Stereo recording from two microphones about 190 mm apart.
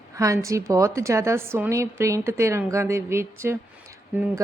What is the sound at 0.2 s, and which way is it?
A woman's voice, 15° right (ahead or behind).